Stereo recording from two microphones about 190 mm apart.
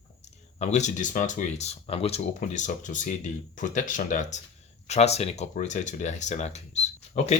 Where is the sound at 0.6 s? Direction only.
40° left (ahead or behind).